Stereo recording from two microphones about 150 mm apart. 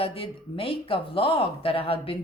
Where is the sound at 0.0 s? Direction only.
40° left (ahead or behind).